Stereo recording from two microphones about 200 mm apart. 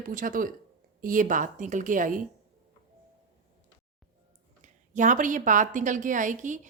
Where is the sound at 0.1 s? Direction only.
45° right (ahead or behind).